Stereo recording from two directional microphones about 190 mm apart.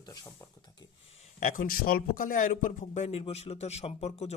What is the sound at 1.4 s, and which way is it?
A man's voice, 45° left (ahead or behind).